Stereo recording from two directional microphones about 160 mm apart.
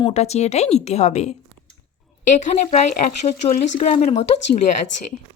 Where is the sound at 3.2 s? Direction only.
50° left (ahead or behind).